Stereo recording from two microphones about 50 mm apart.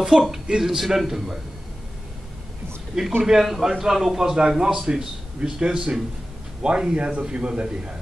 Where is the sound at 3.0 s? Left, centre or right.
Centre.